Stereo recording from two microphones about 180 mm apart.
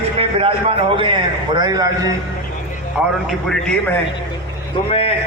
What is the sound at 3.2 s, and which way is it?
Speech, centre (ahead or behind).